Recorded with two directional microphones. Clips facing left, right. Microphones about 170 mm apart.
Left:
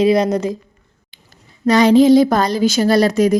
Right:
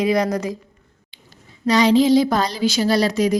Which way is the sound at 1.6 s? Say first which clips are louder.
Left 5 dB; 50° left (ahead or behind).